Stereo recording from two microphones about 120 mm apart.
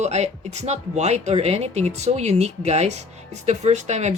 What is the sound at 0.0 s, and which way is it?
A woman's voice, 70° right (ahead or behind).